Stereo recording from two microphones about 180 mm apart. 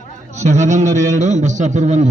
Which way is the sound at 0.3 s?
40° right (ahead or behind).